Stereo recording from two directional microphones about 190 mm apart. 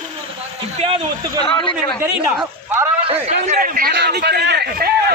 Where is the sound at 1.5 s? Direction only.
25° left (ahead or behind).